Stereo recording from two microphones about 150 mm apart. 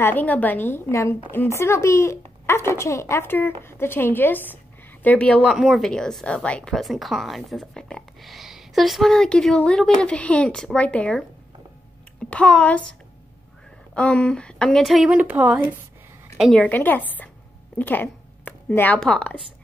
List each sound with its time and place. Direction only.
0.0 s a woman's voice: 10° left (ahead or behind)
13.9 s a woman's voice: 5° left (ahead or behind); by 15.6 s 10° right (ahead or behind)
16.3 s a woman's voice: centre (ahead or behind)